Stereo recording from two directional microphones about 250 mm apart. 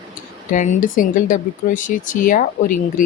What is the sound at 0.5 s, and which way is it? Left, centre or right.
Speech, left.